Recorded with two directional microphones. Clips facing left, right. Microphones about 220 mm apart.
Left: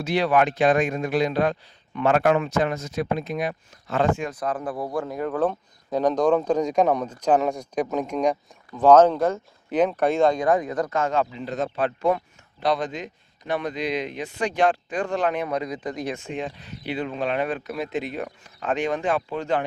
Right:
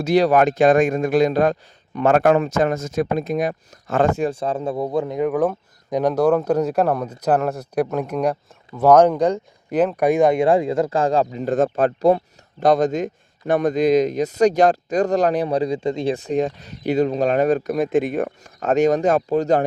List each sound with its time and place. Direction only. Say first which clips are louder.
0.0 s speech: right 5 dB; 40° right (ahead or behind)